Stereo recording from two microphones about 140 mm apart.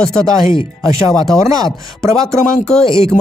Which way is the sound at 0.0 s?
5° left (ahead or behind).